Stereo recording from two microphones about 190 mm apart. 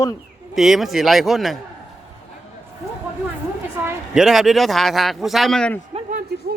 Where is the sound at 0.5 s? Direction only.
Centre (ahead or behind).